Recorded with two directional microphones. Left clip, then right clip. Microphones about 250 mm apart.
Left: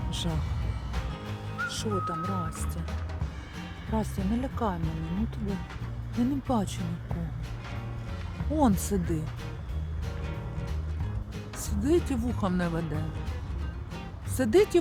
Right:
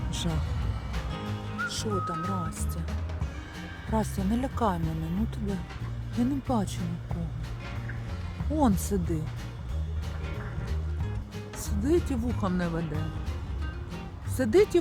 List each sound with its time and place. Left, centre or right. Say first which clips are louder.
0.1 s music: right 1 dB; centre
3.9 s speech: right 2 dB; centre
5.0 s speech: right 1 dB; centre
8.5 s speech: even; centre
11.6 s speech: even; centre
13.9 s music: left 1 dB; centre